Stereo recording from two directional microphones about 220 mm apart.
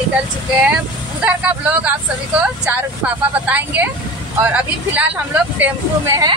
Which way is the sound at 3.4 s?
5° right (ahead or behind).